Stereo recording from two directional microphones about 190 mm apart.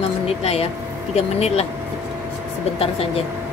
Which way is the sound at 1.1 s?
35° left (ahead or behind).